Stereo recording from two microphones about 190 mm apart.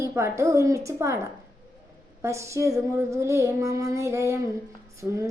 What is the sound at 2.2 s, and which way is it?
Child singing, 15° right (ahead or behind).